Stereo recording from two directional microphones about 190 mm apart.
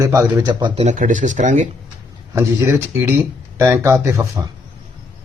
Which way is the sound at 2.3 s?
15° right (ahead or behind).